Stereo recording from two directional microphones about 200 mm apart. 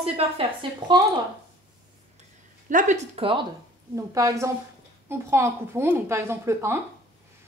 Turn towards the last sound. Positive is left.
turn(degrees=-15)  # may be behind; listen again after turning